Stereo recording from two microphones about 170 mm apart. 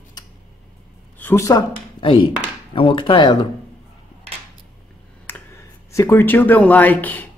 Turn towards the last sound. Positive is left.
turn(degrees=10)  # may be behind; listen again after turning